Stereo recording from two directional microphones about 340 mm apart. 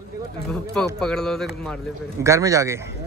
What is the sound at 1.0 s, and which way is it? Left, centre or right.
A man's voice, centre.